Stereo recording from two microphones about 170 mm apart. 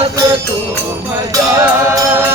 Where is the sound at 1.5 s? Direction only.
15° right (ahead or behind).